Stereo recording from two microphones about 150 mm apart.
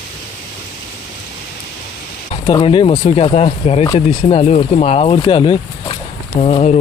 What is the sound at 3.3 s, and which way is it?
Speech, 45° left (ahead or behind).